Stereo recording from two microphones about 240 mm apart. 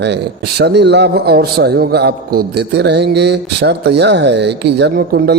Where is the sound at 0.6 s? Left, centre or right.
Right.